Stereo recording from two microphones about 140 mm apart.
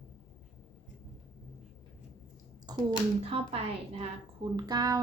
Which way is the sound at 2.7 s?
30° right (ahead or behind).